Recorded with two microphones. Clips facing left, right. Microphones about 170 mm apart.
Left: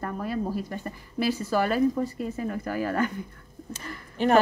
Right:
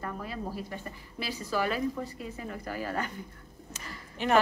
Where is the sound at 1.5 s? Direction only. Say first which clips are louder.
Left 5 dB; 45° left (ahead or behind).